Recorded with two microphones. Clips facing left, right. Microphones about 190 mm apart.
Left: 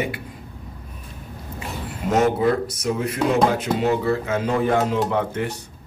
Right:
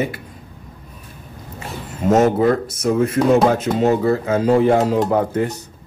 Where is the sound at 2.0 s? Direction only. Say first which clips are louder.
Right 5 dB; 40° right (ahead or behind).